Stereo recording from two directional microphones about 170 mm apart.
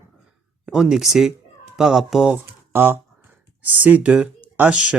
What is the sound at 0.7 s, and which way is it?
Speech, 5° right (ahead or behind).